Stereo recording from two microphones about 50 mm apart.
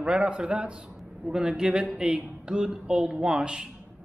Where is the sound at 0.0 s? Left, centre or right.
Right.